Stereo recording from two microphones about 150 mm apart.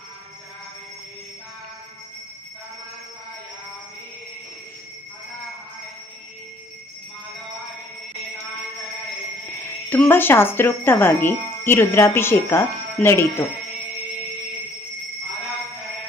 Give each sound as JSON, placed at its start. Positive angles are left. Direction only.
{"t": 9.6, "sound": "speech", "side_deg": 15}